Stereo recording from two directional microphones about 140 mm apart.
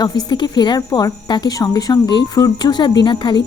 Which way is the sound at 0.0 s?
30° left (ahead or behind).